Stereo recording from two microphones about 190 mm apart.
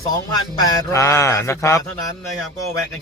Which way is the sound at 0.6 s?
15° left (ahead or behind).